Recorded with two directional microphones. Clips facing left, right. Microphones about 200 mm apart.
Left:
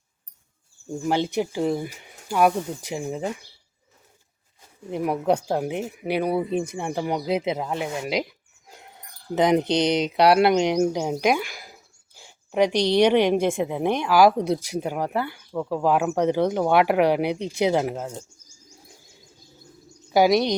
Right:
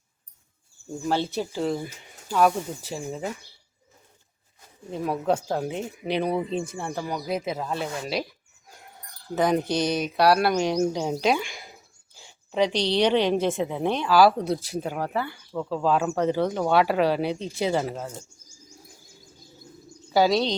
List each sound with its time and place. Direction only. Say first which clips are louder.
1.0 s a woman's voice: left 3 dB; 15° left (ahead or behind)
4.9 s a woman's voice: left 3 dB; 15° left (ahead or behind)
20.1 s a woman's voice: left 3 dB; 15° left (ahead or behind)